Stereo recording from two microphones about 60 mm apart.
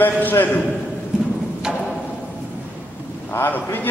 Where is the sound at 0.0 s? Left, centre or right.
Left.